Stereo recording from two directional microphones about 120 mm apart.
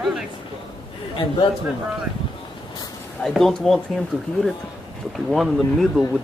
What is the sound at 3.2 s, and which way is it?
Speech, 5° left (ahead or behind).